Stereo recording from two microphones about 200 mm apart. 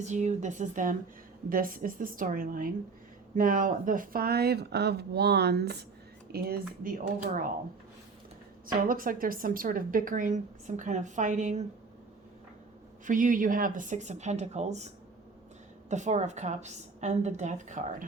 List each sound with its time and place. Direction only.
0.0 s a woman's voice: 35° right (ahead or behind)
8.6 s a woman's voice: 45° right (ahead or behind)
13.1 s a woman's voice: 40° right (ahead or behind)